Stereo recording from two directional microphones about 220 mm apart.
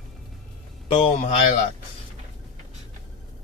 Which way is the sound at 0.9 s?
25° left (ahead or behind).